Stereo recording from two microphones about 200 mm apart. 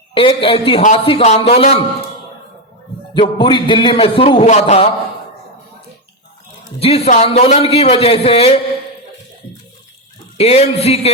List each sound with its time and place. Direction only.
0.1 s a man's voice: 25° left (ahead or behind)
3.2 s a man's voice: 25° left (ahead or behind)
6.7 s a man's voice: 30° left (ahead or behind)
10.3 s speech: 30° left (ahead or behind)